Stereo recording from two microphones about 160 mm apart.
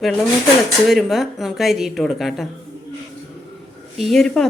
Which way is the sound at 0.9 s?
Centre (ahead or behind).